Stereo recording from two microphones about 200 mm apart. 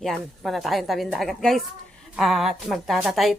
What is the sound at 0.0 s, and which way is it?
Speech, centre (ahead or behind).